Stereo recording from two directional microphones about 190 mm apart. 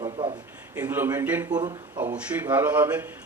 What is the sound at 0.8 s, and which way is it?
Speech, 10° right (ahead or behind).